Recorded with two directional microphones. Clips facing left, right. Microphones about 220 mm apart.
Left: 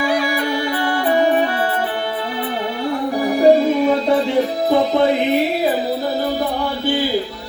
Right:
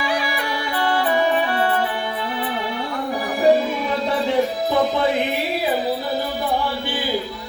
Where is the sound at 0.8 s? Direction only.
45° left (ahead or behind).